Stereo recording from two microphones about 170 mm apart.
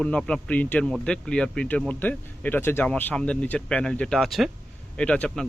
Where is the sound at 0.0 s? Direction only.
5° left (ahead or behind).